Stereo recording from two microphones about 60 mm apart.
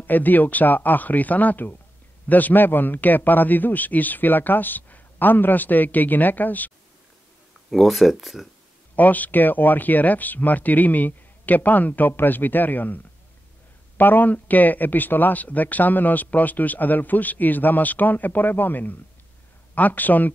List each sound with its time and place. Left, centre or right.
0.0 s a man's voice: left
7.7 s speech: centre
8.9 s speech: left